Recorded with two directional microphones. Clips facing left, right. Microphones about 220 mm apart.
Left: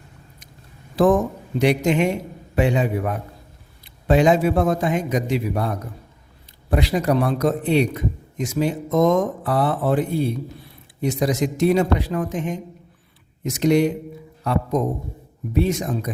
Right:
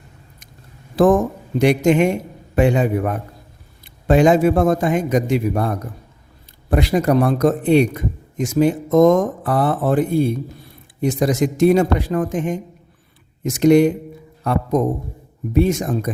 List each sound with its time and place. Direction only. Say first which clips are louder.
0.9 s a man's voice: right 3 dB; 50° right (ahead or behind)